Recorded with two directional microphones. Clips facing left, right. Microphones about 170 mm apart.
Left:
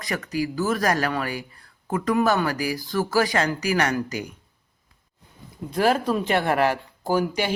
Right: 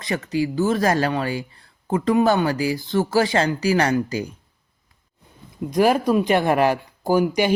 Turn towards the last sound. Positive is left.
turn(degrees=-15)  # may be behind; listen again after turning